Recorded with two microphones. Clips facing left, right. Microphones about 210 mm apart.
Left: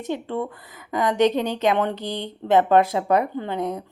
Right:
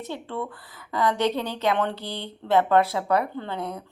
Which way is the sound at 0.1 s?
15° left (ahead or behind).